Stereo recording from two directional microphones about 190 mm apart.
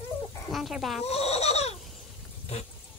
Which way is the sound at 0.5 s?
Centre (ahead or behind).